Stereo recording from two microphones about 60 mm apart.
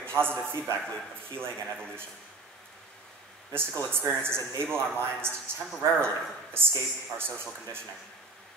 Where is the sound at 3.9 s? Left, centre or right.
Right.